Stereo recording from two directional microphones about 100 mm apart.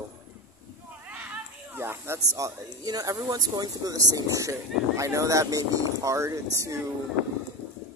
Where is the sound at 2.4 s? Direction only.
35° right (ahead or behind).